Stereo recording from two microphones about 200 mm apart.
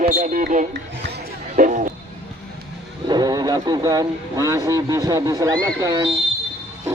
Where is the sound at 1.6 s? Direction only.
40° right (ahead or behind).